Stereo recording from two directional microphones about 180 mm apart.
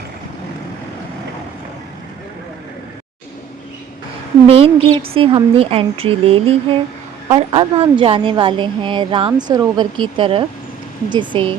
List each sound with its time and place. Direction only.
4.4 s a woman's voice: 30° right (ahead or behind)